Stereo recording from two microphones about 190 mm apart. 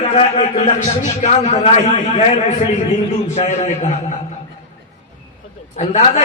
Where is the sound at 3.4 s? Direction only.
35° left (ahead or behind).